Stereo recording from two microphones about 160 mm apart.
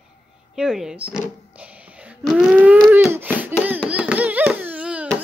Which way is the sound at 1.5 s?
10° right (ahead or behind).